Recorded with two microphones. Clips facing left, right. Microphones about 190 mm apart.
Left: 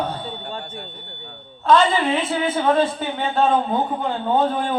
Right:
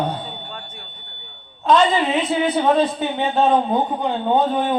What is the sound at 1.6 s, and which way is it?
A man's voice, 20° right (ahead or behind).